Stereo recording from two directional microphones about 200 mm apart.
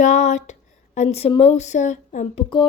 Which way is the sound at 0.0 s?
35° left (ahead or behind).